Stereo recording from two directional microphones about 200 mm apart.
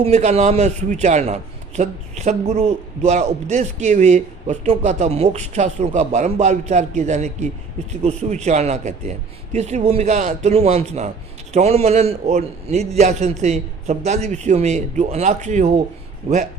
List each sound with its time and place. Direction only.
0.0 s a man's voice: 30° right (ahead or behind)